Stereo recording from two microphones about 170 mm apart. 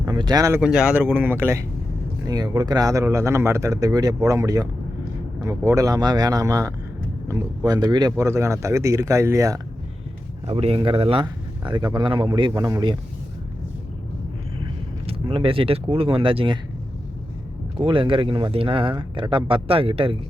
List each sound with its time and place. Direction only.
0.0 s speech: 20° right (ahead or behind)
0.6 s a man's voice: 5° right (ahead or behind)
10.4 s a man's voice: 35° right (ahead or behind)
15.0 s speech: 30° right (ahead or behind)
17.7 s speech: 30° right (ahead or behind)